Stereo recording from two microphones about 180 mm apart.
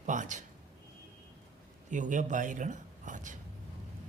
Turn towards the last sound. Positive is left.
turn(degrees=-45)  # may be behind; listen again after turning